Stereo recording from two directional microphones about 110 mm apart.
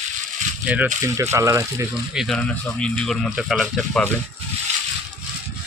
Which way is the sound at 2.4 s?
10° left (ahead or behind).